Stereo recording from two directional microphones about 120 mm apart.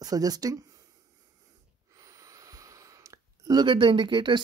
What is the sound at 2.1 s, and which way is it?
Speech, 30° right (ahead or behind).